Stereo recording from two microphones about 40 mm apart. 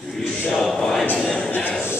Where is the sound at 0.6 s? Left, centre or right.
Centre.